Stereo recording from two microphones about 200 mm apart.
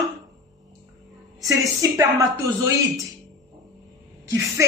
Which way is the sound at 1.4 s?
15° right (ahead or behind).